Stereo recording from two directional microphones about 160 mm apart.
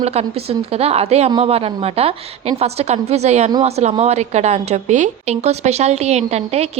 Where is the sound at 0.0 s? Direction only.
40° right (ahead or behind).